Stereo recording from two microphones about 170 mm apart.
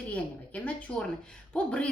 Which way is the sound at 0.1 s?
10° left (ahead or behind).